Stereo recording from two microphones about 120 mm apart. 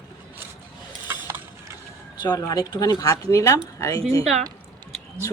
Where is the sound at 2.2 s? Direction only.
35° left (ahead or behind).